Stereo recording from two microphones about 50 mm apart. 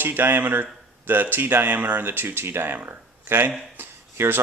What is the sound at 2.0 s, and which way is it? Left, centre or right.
Speech, right.